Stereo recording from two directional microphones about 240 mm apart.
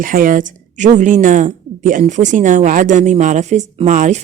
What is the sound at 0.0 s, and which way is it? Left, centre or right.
Speech, right.